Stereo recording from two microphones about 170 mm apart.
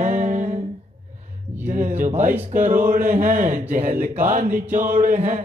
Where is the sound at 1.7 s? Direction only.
50° right (ahead or behind).